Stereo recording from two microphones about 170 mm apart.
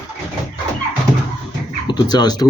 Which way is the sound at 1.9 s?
25° left (ahead or behind).